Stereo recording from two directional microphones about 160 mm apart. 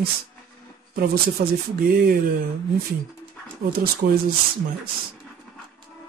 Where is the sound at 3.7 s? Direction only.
70° right (ahead or behind).